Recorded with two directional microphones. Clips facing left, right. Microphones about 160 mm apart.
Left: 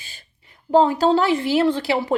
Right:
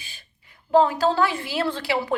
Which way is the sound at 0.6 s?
25° left (ahead or behind).